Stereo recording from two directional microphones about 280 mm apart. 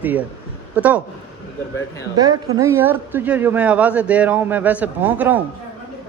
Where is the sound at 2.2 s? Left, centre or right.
Centre.